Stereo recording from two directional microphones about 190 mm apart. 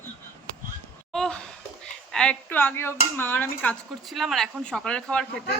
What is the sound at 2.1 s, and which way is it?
Speech, 5° left (ahead or behind).